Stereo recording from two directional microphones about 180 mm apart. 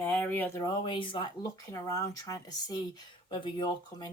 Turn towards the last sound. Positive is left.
turn(degrees=25)  # may be behind; listen again after turning